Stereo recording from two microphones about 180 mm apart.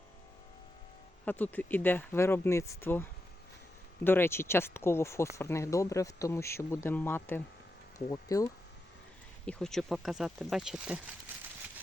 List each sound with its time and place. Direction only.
1.2 s speech: 10° left (ahead or behind)
9.5 s speech: 5° left (ahead or behind)